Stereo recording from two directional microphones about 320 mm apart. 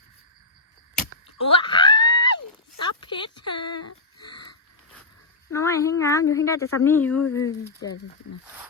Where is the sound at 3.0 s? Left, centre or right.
Centre.